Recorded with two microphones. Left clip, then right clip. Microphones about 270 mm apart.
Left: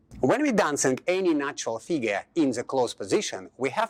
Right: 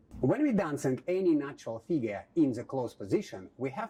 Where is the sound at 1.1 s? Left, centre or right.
Centre.